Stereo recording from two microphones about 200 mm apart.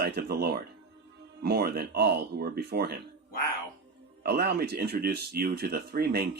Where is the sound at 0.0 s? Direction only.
50° right (ahead or behind).